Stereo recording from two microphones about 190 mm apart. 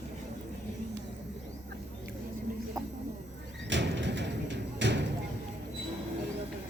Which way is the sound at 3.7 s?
70° right (ahead or behind).